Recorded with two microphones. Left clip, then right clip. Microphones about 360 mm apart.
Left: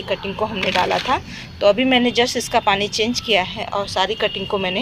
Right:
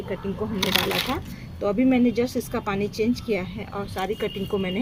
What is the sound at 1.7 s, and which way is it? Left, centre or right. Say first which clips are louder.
Speech: left 5 dB; left.